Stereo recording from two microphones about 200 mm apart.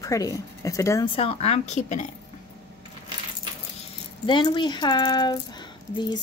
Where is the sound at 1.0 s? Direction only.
30° left (ahead or behind).